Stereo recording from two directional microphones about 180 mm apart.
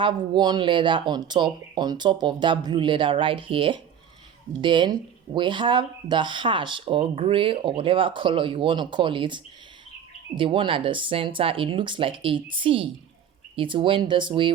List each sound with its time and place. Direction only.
0.0 s speech: 25° right (ahead or behind)